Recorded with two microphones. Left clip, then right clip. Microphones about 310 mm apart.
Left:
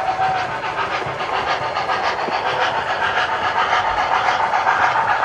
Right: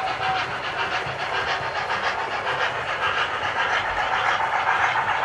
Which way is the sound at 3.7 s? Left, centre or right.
Left.